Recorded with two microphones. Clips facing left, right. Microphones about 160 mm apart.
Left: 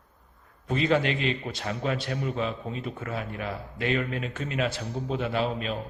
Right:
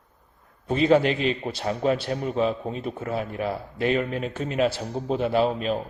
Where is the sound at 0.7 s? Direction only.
35° right (ahead or behind).